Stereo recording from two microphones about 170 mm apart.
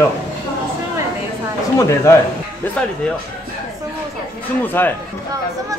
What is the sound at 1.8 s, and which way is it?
Speech, 15° left (ahead or behind).